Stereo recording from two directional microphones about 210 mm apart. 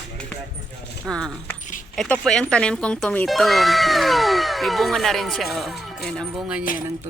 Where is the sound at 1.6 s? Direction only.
35° left (ahead or behind).